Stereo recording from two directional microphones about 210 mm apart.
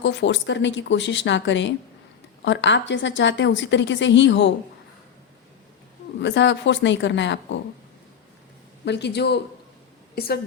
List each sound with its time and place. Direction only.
0.0 s a woman's voice: 60° left (ahead or behind)
6.1 s a woman's voice: 55° left (ahead or behind)
8.8 s speech: 55° left (ahead or behind)